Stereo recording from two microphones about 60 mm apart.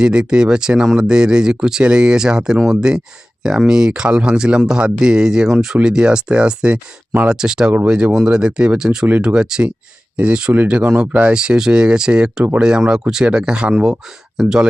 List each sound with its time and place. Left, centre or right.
0.0 s speech: centre